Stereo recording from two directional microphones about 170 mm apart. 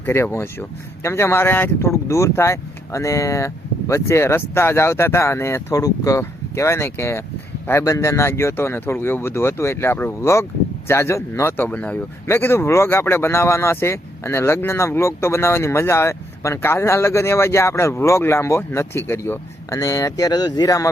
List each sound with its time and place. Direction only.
0.0 s speech: 15° left (ahead or behind)